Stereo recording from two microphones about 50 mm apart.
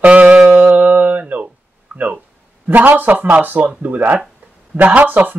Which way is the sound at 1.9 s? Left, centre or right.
Right.